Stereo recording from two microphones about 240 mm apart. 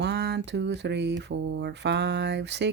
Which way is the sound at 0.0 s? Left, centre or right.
Right.